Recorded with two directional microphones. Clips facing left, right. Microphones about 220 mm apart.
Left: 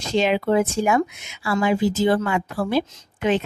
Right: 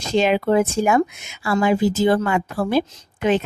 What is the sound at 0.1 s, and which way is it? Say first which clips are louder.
Speech: right 2 dB; 45° right (ahead or behind).